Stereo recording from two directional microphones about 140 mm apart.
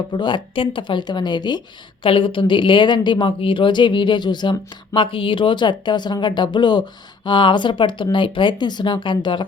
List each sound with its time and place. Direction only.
0.1 s a woman's voice: 35° left (ahead or behind)